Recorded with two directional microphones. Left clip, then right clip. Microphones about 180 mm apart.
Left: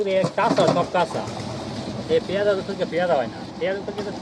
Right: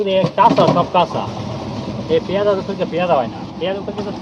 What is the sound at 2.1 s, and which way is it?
Speech, 5° left (ahead or behind).